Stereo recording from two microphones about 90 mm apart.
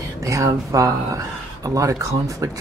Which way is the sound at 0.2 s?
40° right (ahead or behind).